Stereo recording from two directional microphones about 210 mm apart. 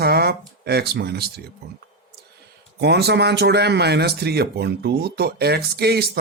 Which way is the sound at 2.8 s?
50° right (ahead or behind).